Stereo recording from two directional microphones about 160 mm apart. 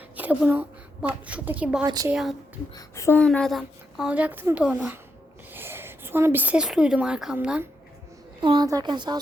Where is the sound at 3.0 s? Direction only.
15° left (ahead or behind).